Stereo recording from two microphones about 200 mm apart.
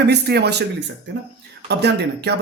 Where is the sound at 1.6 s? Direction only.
55° right (ahead or behind).